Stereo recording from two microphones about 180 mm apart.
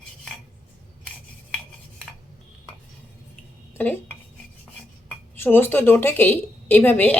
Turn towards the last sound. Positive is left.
turn(degrees=10)  # may be behind; listen again after turning